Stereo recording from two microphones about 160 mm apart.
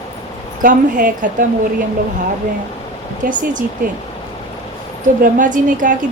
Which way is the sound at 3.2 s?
55° right (ahead or behind).